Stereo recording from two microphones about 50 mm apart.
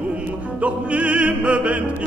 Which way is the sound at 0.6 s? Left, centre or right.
Right.